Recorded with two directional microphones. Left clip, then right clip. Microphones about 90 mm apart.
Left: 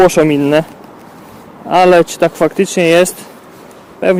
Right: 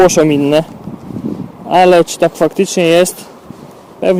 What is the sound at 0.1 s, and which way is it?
Speech, 20° right (ahead or behind).